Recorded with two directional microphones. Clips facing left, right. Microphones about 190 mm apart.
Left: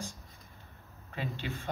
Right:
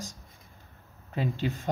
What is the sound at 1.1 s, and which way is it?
Speech, 45° right (ahead or behind).